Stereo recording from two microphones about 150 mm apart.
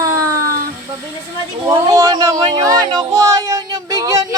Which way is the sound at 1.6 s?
25° right (ahead or behind).